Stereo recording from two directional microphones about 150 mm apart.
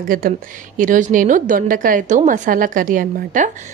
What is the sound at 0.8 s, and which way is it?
A woman's voice, 60° right (ahead or behind).